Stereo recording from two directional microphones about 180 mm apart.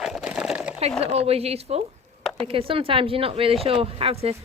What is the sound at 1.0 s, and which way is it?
A woman's voice, 35° right (ahead or behind).